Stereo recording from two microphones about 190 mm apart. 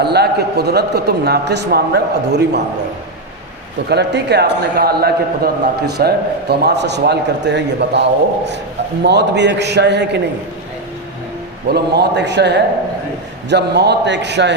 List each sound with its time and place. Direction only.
0.0 s a man's voice: 60° right (ahead or behind)
3.8 s a man's voice: 60° right (ahead or behind)
11.7 s a man's voice: 65° right (ahead or behind)